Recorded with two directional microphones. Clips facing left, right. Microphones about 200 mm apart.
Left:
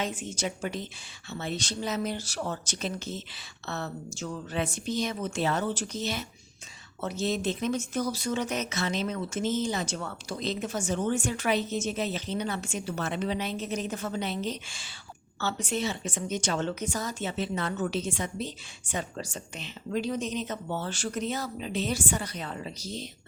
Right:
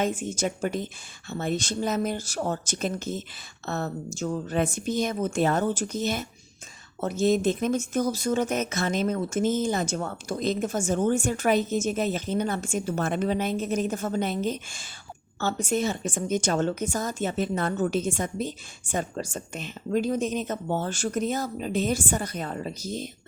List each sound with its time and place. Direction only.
0.0 s speech: 50° right (ahead or behind)